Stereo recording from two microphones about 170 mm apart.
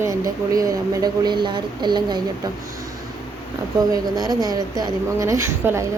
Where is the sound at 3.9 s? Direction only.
20° right (ahead or behind).